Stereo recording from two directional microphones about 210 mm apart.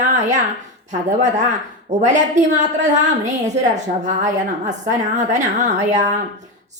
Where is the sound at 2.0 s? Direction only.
35° right (ahead or behind).